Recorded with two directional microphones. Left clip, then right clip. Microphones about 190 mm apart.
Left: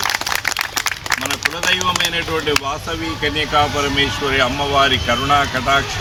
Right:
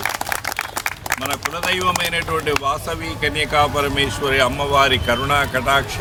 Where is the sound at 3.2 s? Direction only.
30° right (ahead or behind).